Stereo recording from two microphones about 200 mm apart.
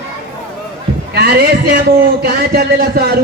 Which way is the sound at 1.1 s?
50° right (ahead or behind).